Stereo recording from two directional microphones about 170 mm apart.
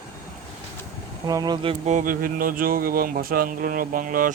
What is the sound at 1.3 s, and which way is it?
Speech, 25° right (ahead or behind).